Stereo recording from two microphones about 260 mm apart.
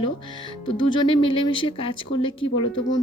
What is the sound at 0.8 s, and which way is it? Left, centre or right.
Speech, centre.